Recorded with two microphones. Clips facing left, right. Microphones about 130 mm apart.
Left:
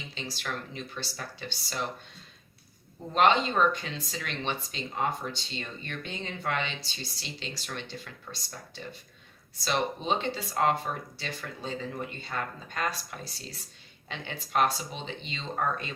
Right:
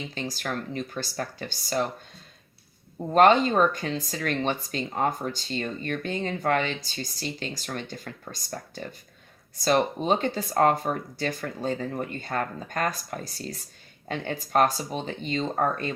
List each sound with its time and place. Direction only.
0.1 s speech: 45° right (ahead or behind)
3.1 s speech: 50° right (ahead or behind)